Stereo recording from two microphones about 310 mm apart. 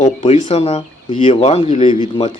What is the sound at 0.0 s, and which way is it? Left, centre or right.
Speech, left.